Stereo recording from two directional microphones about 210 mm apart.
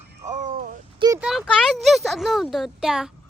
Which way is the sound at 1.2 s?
Centre (ahead or behind).